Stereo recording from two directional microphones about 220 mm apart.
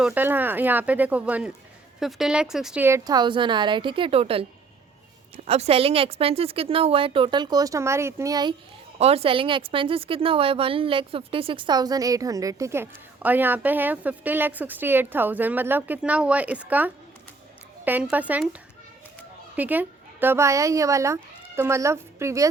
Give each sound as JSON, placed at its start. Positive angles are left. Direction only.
{"t": 0.0, "sound": "a woman's voice", "side_deg": -10}
{"t": 5.5, "sound": "a woman's voice", "side_deg": -30}
{"t": 19.5, "sound": "speech", "side_deg": -10}